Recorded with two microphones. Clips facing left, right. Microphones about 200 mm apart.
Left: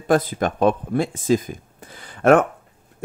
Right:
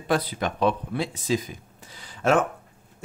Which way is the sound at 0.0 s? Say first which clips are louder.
Left 6 dB; 50° left (ahead or behind).